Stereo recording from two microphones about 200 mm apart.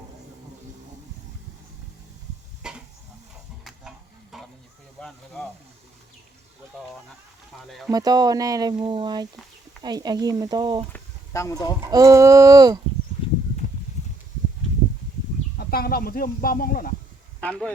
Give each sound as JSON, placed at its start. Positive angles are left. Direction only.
{"t": 2.6, "sound": "a sound", "side_deg": -5}
{"t": 3.6, "sound": "chicken", "side_deg": 0}
{"t": 4.9, "sound": "speech", "side_deg": 5}
{"t": 7.9, "sound": "speech", "side_deg": -20}
{"t": 10.9, "sound": "a sound", "side_deg": 15}
{"t": 11.8, "sound": "speech", "side_deg": -15}
{"t": 15.5, "sound": "speech", "side_deg": 50}
{"t": 17.4, "sound": "speech", "side_deg": 5}